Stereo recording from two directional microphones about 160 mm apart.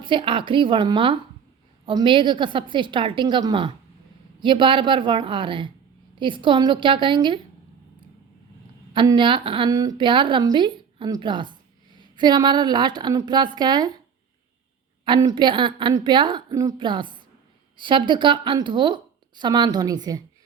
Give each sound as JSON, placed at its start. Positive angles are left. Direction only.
{"t": 0.0, "sound": "a woman's voice", "side_deg": -30}
{"t": 8.9, "sound": "a woman's voice", "side_deg": -30}
{"t": 15.0, "sound": "a woman's voice", "side_deg": -25}